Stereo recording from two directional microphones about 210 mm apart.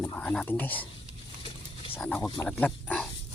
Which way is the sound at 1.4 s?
25° left (ahead or behind).